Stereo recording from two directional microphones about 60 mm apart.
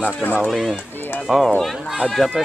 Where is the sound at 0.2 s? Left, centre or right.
Left.